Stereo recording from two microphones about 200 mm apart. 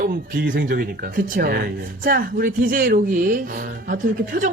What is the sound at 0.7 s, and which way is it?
Speech, 45° right (ahead or behind).